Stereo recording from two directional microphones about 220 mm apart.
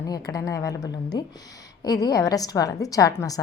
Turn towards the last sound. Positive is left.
turn(degrees=15)  # may be behind; listen again after turning